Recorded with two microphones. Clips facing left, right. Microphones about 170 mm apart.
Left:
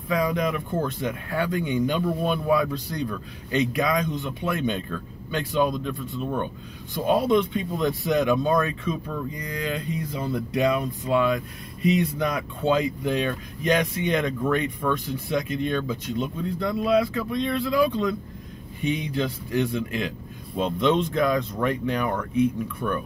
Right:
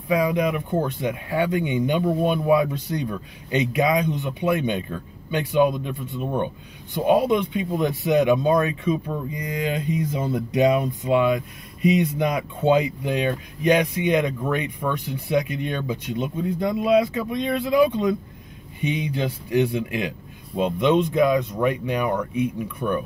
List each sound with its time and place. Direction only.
0.1 s speech: 15° right (ahead or behind)